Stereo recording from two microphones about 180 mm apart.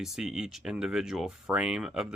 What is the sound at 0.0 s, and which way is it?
Speech, centre (ahead or behind).